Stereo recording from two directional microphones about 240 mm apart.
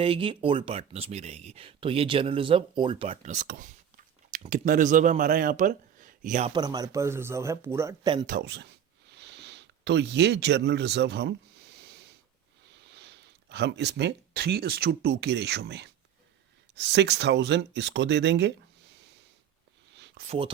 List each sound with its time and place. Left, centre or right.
0.0 s speech: right
6.5 s speech: centre
8.3 s speech: right
12.9 s speech: right
20.2 s speech: right